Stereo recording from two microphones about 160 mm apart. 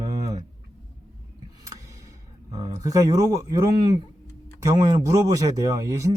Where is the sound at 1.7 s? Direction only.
20° right (ahead or behind).